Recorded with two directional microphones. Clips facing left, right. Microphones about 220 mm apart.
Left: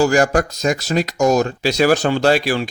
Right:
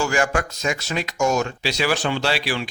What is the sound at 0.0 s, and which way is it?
Speech, 40° left (ahead or behind).